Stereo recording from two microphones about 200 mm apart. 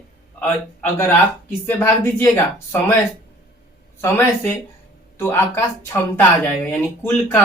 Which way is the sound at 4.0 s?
10° left (ahead or behind).